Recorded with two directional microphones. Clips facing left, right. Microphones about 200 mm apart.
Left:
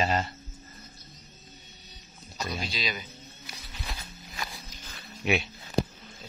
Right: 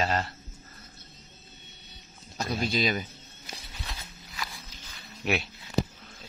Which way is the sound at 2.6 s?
50° right (ahead or behind).